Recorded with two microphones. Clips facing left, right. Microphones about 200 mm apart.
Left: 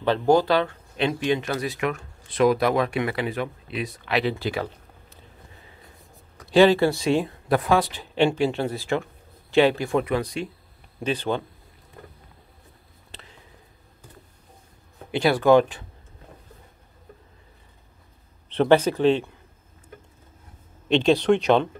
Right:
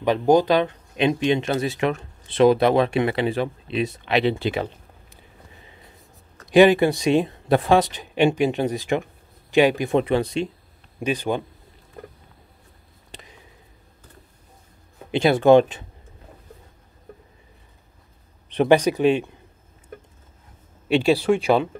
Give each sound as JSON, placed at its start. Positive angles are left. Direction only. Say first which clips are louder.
{"t": 0.0, "sound": "speech", "louder": "right 2 dB", "side_deg": -15}
{"t": 6.5, "sound": "speech", "louder": "right 2 dB", "side_deg": -15}
{"t": 11.0, "sound": "speech", "louder": "right 2 dB", "side_deg": -15}
{"t": 13.1, "sound": "a sound", "louder": "right 3 dB", "side_deg": -15}
{"t": 15.0, "sound": "speech", "louder": "right 3 dB", "side_deg": -20}
{"t": 18.5, "sound": "speech", "louder": "right 1 dB", "side_deg": -15}
{"t": 20.9, "sound": "speech", "louder": "even", "side_deg": -10}